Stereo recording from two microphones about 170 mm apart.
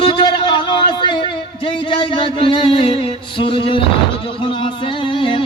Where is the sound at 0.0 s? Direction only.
30° left (ahead or behind).